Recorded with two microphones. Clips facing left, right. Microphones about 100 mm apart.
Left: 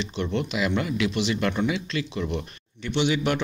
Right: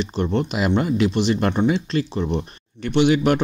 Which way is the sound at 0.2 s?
35° right (ahead or behind).